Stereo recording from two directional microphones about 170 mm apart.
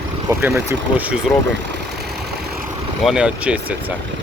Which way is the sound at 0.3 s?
15° right (ahead or behind).